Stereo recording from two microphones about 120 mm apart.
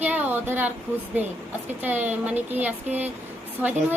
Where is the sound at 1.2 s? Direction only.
15° right (ahead or behind).